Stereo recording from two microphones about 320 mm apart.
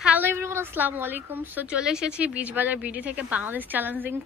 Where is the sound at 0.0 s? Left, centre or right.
Centre.